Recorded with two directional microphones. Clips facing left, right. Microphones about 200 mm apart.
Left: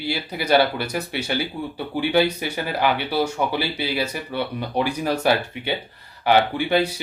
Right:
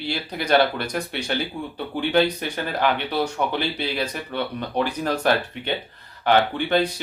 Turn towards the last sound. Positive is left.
turn(degrees=10)  # may be behind; listen again after turning